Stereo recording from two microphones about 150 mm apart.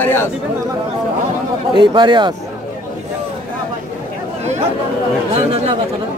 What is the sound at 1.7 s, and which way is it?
Speech, 30° right (ahead or behind).